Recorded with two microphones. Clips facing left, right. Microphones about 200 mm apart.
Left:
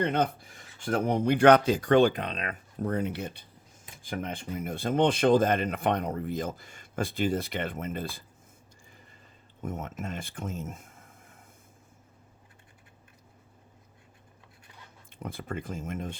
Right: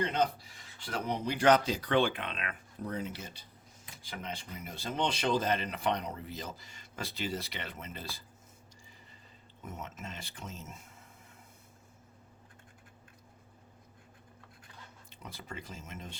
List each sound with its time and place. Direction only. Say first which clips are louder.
0.0 s speech: left 4 dB; 55° left (ahead or behind)
2.9 s speech: left 8 dB; 60° left (ahead or behind)
9.6 s speech: left 8 dB; 50° left (ahead or behind)
15.1 s speech: left 9 dB; 55° left (ahead or behind)